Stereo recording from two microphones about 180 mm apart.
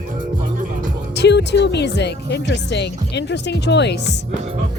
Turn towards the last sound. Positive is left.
turn(degrees=70)  # may be behind; listen again after turning